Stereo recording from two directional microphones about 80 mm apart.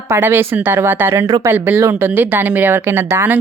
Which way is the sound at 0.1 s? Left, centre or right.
Right.